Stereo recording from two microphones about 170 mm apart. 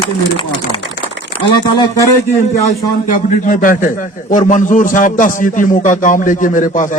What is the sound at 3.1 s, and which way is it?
A man's voice, 50° left (ahead or behind).